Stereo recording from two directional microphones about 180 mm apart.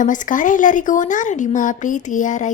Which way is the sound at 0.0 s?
45° left (ahead or behind).